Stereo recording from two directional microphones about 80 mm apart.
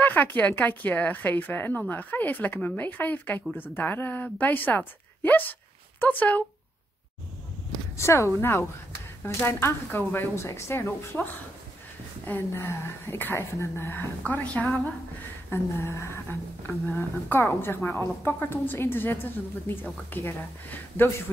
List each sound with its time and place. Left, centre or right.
0.0 s speech: left
8.0 s speech: left
12.3 s speech: left
14.2 s a woman's voice: centre
15.5 s speech: left